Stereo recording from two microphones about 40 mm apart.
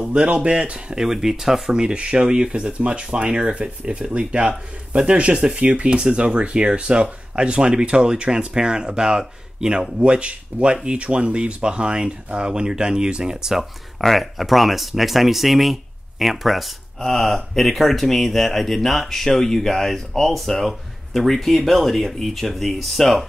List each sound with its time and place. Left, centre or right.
0.1 s speech: right
0.9 s speech: centre
14.0 s speech: centre
17.0 s speech: centre